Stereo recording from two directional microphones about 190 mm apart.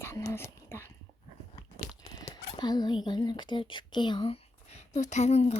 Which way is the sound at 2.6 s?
20° left (ahead or behind).